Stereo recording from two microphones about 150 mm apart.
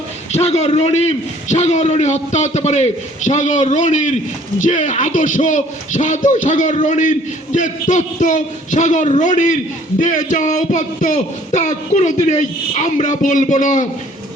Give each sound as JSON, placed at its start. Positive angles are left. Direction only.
{"t": 0.3, "sound": "a man's voice", "side_deg": 45}